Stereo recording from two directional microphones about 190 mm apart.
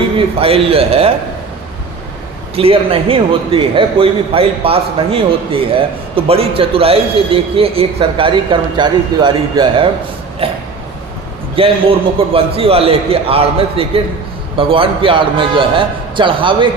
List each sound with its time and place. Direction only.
0.2 s a man's voice: 30° right (ahead or behind)
2.6 s a man's voice: 30° right (ahead or behind)